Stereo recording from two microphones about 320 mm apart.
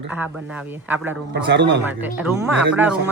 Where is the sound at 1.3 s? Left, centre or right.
Right.